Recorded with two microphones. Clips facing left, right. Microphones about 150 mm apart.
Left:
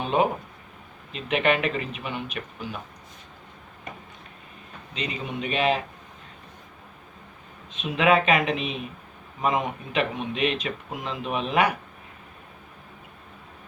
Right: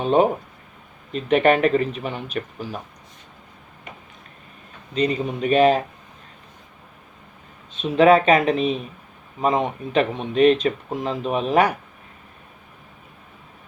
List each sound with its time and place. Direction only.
0.0 s a sound: 40° right (ahead or behind)
1.1 s speech: 40° right (ahead or behind)
4.9 s speech: 40° right (ahead or behind)
7.8 s speech: 35° right (ahead or behind)